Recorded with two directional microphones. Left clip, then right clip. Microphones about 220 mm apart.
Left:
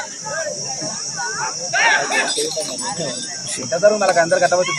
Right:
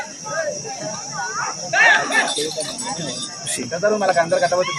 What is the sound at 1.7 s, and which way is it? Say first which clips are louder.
Speech: right 2 dB; 5° left (ahead or behind).